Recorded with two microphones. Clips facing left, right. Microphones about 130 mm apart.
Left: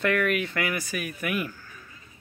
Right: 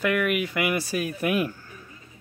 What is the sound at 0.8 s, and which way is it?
Speech, 30° right (ahead or behind).